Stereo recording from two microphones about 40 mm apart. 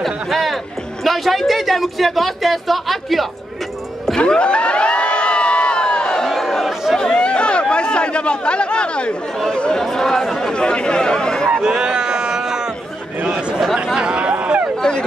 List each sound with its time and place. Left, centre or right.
0.0 s a man's voice: centre
4.2 s crowd: left
6.2 s crowd: centre
7.0 s chatter: left
9.8 s speech: centre
10.5 s speech: left
11.6 s a sound: right
13.9 s a sound: right
14.8 s a sound: left